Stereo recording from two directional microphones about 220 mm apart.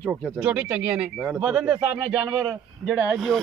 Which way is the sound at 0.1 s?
5° right (ahead or behind).